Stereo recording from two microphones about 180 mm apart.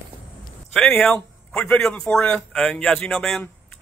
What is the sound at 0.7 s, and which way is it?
A man's voice, 5° left (ahead or behind).